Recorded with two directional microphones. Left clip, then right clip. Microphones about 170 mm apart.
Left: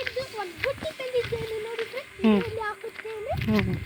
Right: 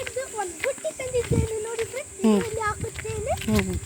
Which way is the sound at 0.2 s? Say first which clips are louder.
Right 2 dB; 25° right (ahead or behind).